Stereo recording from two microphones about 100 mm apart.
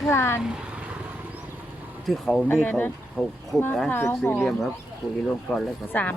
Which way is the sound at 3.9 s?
25° left (ahead or behind).